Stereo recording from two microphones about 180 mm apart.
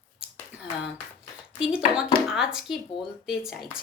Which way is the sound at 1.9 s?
5° right (ahead or behind).